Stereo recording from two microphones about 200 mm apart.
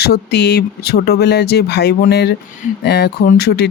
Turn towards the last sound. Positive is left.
turn(degrees=55)  # may be behind; listen again after turning